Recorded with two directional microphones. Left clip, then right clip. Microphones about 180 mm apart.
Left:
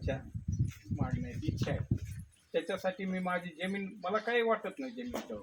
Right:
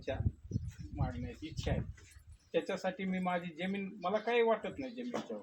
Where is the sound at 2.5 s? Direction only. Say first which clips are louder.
Left 1 dB; centre (ahead or behind).